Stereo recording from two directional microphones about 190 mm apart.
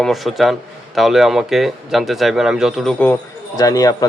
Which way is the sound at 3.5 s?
20° left (ahead or behind).